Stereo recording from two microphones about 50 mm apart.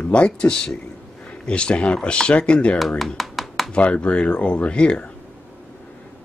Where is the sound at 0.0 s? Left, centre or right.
Left.